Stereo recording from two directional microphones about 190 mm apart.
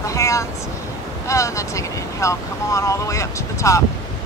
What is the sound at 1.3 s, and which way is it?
Speech, 15° left (ahead or behind).